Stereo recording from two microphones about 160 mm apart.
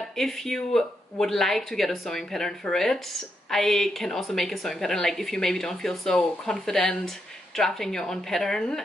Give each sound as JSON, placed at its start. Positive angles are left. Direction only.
{"t": 0.1, "sound": "a woman's voice", "side_deg": 0}